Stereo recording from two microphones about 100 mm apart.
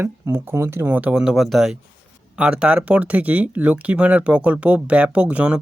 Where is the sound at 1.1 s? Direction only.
5° right (ahead or behind).